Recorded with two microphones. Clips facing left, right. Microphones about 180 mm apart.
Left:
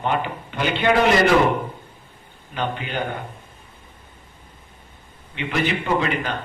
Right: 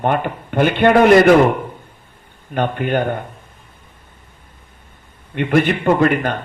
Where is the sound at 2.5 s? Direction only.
55° right (ahead or behind).